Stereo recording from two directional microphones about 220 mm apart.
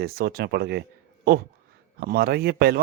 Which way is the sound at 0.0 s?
45° right (ahead or behind).